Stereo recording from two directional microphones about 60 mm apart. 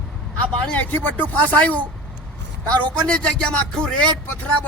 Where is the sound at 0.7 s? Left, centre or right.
Left.